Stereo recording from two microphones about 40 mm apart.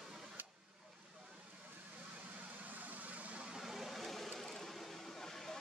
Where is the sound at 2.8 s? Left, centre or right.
Right.